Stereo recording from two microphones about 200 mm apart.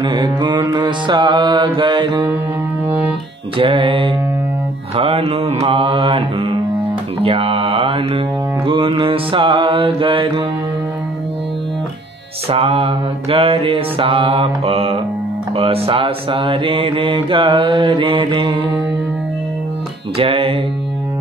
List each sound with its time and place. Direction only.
0.0 s mantra: 20° right (ahead or behind)
3.5 s mantra: 25° right (ahead or behind)
12.4 s mantra: 30° right (ahead or behind)
20.2 s mantra: 25° right (ahead or behind)